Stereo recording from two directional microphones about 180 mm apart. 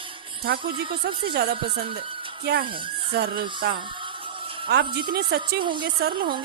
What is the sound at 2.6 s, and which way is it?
Speech, 30° right (ahead or behind).